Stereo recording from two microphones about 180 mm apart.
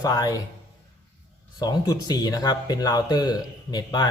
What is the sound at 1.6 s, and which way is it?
Speech, 20° left (ahead or behind).